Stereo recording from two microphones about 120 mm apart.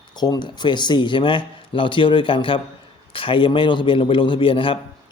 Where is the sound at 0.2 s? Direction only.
40° left (ahead or behind).